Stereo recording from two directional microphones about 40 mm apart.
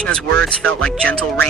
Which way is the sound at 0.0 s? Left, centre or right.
Left.